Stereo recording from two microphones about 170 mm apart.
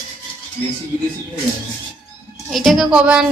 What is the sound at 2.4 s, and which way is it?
Speech, centre (ahead or behind).